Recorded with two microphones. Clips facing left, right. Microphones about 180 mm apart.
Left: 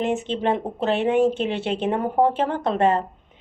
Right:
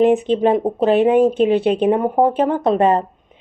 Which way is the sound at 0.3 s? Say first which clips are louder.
Right 8 dB; 15° right (ahead or behind).